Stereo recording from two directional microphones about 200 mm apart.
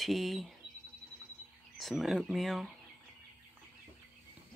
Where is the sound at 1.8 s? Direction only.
Centre (ahead or behind).